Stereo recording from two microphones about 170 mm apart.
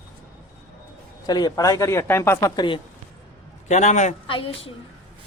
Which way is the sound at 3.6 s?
45° left (ahead or behind).